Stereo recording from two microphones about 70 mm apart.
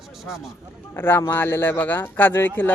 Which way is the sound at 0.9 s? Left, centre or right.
Left.